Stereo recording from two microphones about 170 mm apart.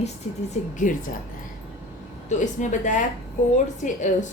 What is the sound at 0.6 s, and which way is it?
Speech, 40° left (ahead or behind).